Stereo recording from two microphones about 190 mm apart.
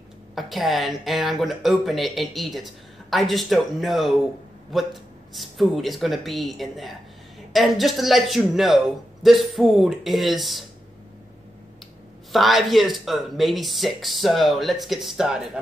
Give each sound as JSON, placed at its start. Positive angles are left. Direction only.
{"t": 0.3, "sound": "speech", "side_deg": 0}
{"t": 12.3, "sound": "speech", "side_deg": 0}